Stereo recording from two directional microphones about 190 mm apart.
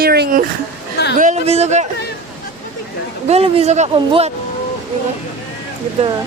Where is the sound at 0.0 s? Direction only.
55° right (ahead or behind).